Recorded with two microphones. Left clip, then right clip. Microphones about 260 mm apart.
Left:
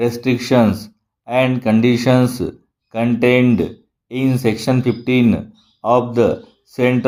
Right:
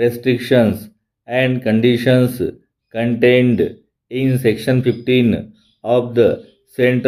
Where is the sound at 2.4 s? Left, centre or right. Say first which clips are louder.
Right 3 dB; left.